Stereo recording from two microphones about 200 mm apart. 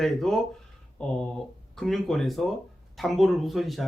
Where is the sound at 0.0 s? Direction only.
Centre (ahead or behind).